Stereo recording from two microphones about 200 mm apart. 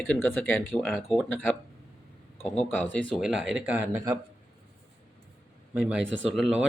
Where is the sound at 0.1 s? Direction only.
10° left (ahead or behind).